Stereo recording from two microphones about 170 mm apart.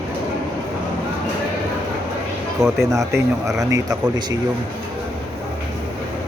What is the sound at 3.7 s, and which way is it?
Speech, 20° right (ahead or behind).